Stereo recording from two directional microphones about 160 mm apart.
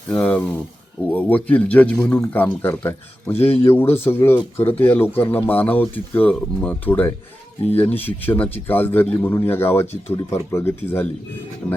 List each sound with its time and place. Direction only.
0.1 s a man's voice: 10° left (ahead or behind)